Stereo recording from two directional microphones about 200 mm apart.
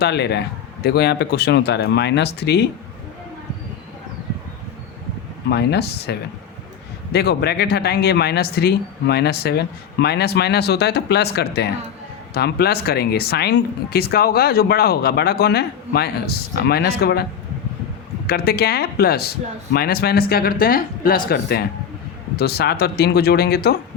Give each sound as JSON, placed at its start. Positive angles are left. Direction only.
{"t": 0.0, "sound": "a man's voice", "side_deg": 55}
{"t": 5.5, "sound": "a man's voice", "side_deg": 55}
{"t": 18.3, "sound": "speech", "side_deg": 50}